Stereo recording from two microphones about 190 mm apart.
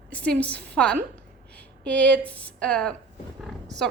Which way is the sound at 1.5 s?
5° left (ahead or behind).